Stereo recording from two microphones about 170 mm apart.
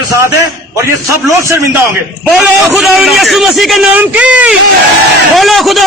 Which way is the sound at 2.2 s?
Centre (ahead or behind).